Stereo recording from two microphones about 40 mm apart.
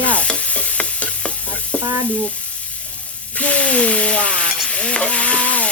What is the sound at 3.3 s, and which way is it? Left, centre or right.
Speech, left.